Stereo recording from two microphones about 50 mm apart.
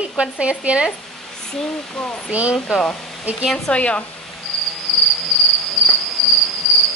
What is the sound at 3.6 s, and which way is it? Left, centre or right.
Speech, left.